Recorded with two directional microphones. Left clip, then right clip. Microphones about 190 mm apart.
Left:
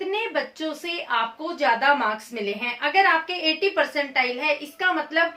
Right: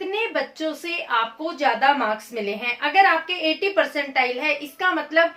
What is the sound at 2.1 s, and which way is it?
A woman's voice, 15° left (ahead or behind).